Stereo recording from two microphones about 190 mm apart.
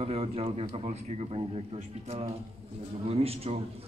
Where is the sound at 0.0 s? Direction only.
30° right (ahead or behind).